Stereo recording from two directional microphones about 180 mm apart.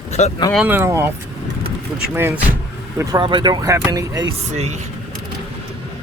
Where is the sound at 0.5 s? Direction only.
5° right (ahead or behind).